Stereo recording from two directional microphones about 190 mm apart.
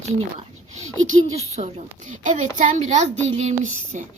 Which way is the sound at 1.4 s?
35° right (ahead or behind).